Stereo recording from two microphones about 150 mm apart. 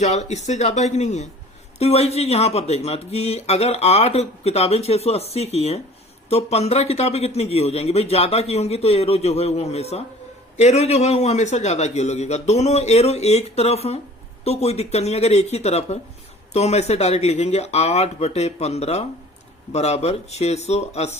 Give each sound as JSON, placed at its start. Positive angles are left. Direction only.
{"t": 0.0, "sound": "speech", "side_deg": 50}